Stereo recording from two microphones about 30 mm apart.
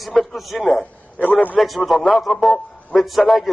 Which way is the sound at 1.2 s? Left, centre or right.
Left.